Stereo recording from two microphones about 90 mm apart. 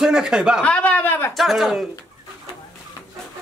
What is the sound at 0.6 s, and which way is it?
Speech, 15° left (ahead or behind).